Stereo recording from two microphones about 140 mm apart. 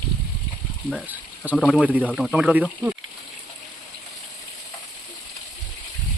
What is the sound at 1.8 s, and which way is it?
Speech, 10° right (ahead or behind).